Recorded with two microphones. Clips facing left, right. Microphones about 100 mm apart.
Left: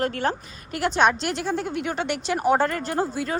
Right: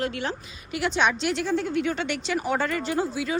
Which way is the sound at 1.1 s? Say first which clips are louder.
Right 1 dB; 5° left (ahead or behind).